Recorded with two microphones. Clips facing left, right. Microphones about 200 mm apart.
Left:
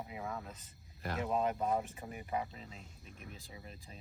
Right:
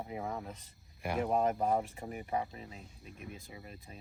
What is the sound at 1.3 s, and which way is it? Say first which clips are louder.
Speech: right 2 dB; 45° right (ahead or behind).